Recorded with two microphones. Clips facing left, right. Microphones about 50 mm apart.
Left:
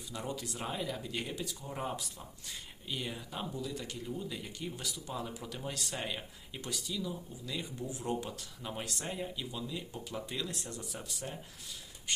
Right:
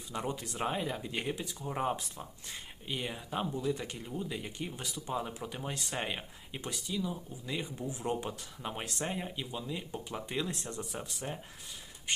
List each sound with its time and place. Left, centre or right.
0.1 s speech: right